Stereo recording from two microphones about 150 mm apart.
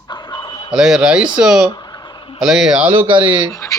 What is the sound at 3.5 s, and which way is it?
Speech, 20° left (ahead or behind).